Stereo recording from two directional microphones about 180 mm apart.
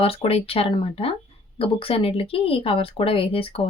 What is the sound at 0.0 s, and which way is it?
Speech, 30° left (ahead or behind).